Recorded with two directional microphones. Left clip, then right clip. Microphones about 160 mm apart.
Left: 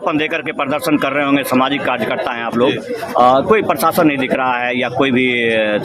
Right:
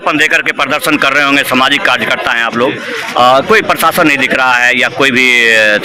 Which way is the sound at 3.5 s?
Centre (ahead or behind).